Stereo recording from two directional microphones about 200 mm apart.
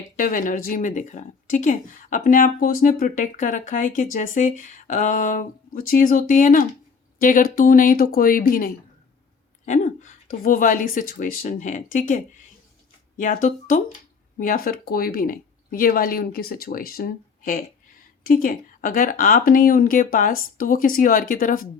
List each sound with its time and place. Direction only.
0.2 s speech: 40° left (ahead or behind)